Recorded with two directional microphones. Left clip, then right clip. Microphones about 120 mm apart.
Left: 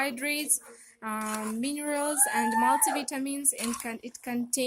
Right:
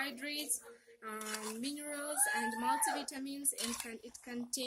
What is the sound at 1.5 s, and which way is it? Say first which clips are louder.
A woman's voice: left 12 dB; 90° left.